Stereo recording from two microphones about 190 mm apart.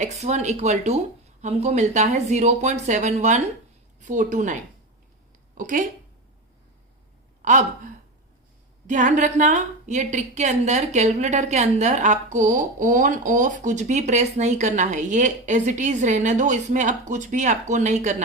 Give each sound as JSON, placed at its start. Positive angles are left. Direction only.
{"t": 0.0, "sound": "a woman's voice", "side_deg": -40}
{"t": 5.5, "sound": "speech", "side_deg": -45}
{"t": 7.4, "sound": "speech", "side_deg": -40}
{"t": 8.9, "sound": "a woman's voice", "side_deg": -40}